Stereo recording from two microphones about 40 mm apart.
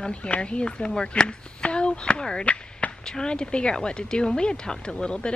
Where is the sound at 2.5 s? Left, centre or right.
Left.